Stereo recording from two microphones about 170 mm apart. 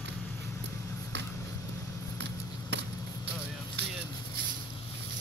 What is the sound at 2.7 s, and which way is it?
Basketball bounce, 90° right.